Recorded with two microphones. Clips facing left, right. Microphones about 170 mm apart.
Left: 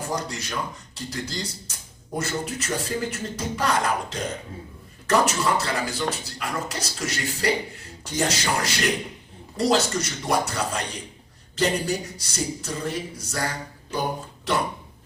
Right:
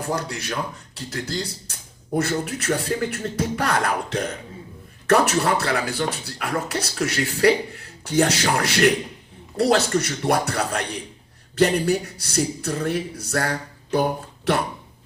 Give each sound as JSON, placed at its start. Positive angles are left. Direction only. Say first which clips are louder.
{"t": 0.0, "sound": "speech", "louder": "right 3 dB", "side_deg": -60}